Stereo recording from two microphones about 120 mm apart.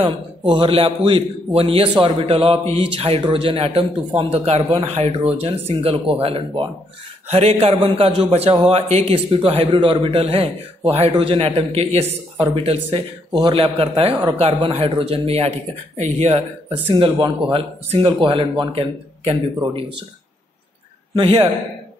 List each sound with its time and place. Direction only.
0.0 s a man's voice: 45° right (ahead or behind)
7.2 s a man's voice: 55° right (ahead or behind)
10.2 s a man's voice: 55° right (ahead or behind)
11.4 s a man's voice: 60° right (ahead or behind)
13.3 s speech: 35° right (ahead or behind)
13.6 s a man's voice: 50° right (ahead or behind)
16.0 s a man's voice: 65° right (ahead or behind)
16.9 s a man's voice: 45° right (ahead or behind)
21.1 s a man's voice: 50° right (ahead or behind)